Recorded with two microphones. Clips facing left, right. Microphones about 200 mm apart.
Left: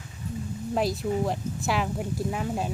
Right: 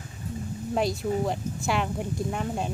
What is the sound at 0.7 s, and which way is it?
Speech, centre (ahead or behind).